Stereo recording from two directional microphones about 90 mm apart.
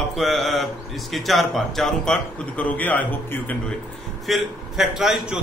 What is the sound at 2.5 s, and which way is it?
A man's voice, 15° left (ahead or behind).